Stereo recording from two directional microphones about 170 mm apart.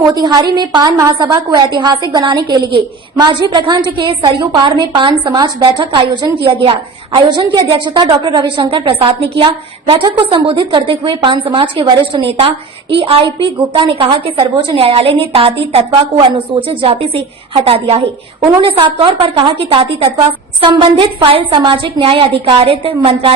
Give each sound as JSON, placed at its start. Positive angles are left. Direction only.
{"t": 0.0, "sound": "a woman's voice", "side_deg": -25}